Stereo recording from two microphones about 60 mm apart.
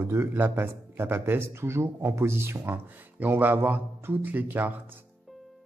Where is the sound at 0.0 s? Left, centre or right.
Right.